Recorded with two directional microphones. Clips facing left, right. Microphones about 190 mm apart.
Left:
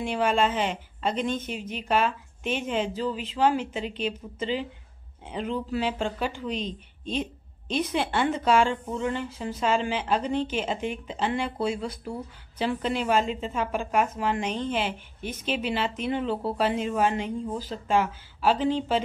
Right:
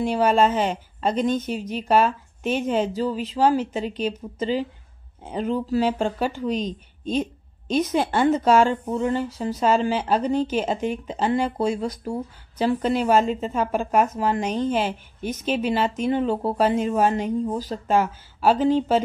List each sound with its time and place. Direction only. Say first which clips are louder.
0.0 s speech: right 5 dB; 40° right (ahead or behind)